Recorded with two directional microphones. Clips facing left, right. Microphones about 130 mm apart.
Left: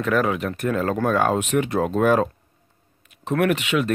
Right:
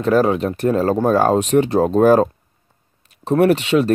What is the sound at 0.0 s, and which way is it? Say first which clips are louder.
Speech: right 6 dB; 30° right (ahead or behind).